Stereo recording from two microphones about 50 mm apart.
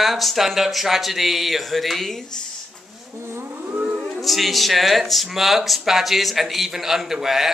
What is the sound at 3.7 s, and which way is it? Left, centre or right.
Siren, right.